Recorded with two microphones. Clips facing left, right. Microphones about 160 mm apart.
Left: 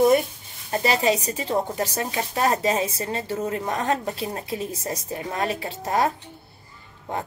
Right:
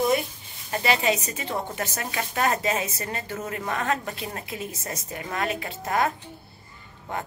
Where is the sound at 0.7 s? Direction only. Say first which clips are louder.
Left 2 dB; 35° left (ahead or behind).